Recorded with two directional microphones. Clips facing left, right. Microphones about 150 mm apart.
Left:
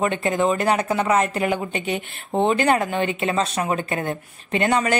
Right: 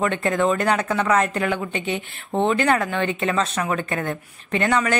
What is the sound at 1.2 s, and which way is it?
Speech, 15° left (ahead or behind).